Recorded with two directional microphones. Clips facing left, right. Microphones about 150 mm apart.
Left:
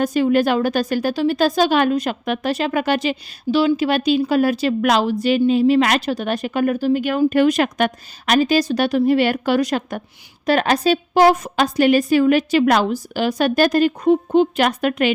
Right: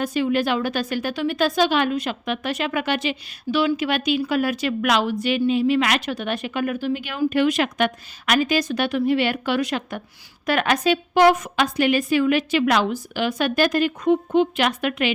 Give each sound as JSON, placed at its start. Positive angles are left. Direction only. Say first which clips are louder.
{"t": 0.0, "sound": "a woman's voice", "louder": "left 5 dB", "side_deg": 45}